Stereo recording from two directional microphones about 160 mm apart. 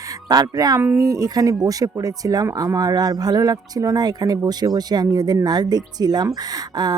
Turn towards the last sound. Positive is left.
turn(degrees=-25)  # may be behind; listen again after turning